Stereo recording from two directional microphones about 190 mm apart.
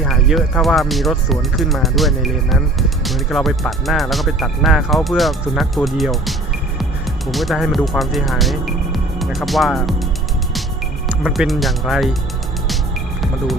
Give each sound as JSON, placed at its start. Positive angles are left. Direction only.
{"t": 0.0, "sound": "speech", "side_deg": 0}
{"t": 11.2, "sound": "speech", "side_deg": 0}